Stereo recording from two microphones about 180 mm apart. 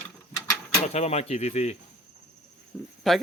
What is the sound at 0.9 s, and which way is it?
Speech, 35° left (ahead or behind).